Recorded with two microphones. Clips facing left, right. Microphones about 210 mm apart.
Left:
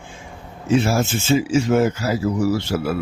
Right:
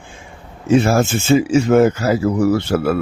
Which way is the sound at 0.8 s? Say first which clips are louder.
Right 4 dB; 55° right (ahead or behind).